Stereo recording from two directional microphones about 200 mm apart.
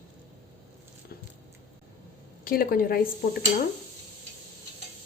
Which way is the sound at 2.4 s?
45° left (ahead or behind).